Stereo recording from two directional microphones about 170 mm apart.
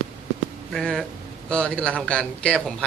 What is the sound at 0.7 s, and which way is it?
A man's voice, 5° left (ahead or behind).